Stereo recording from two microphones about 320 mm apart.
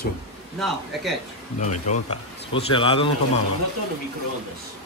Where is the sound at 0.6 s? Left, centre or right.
Centre.